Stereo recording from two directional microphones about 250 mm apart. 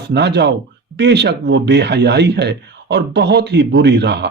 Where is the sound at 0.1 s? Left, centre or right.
Right.